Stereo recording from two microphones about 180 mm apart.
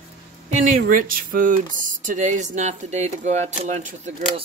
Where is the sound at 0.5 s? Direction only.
45° right (ahead or behind).